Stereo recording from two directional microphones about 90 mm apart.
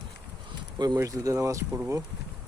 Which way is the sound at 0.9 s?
40° right (ahead or behind).